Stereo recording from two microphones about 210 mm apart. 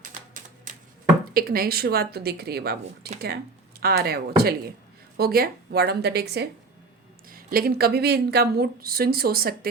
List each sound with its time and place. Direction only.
0.0 s typewriter: 40° right (ahead or behind)
1.3 s speech: 45° right (ahead or behind)